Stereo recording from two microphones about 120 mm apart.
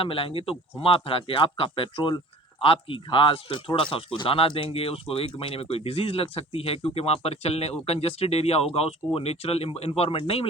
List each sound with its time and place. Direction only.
0.0 s speech: 50° left (ahead or behind)